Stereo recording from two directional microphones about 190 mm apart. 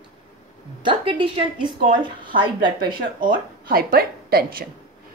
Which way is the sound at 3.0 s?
50° right (ahead or behind).